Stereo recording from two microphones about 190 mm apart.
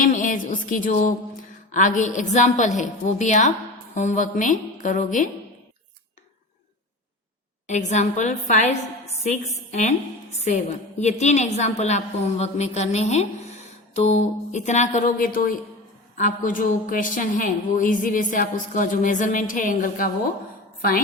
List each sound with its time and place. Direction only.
0.0 s music: 45° left (ahead or behind)
1.7 s a woman's voice: 40° left (ahead or behind)
7.7 s a woman's voice: 40° left (ahead or behind)